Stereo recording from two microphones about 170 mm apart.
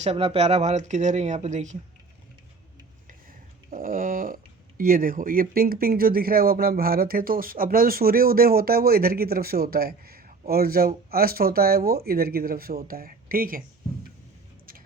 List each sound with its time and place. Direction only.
0.0 s speech: 35° right (ahead or behind)
3.1 s a sound: 55° right (ahead or behind)
4.8 s speech: 55° right (ahead or behind)